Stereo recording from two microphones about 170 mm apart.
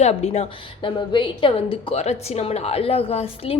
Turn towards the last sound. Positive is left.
turn(degrees=35)  # may be behind; listen again after turning